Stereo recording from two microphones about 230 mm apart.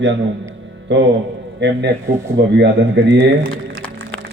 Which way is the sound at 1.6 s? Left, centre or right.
Right.